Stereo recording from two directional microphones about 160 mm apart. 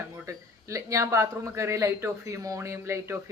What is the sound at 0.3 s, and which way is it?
Speech, 20° right (ahead or behind).